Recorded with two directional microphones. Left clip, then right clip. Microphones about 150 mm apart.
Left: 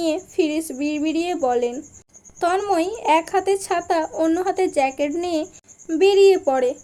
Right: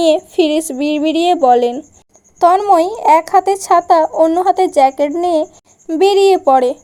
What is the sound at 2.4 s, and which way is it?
A woman's voice, 45° right (ahead or behind).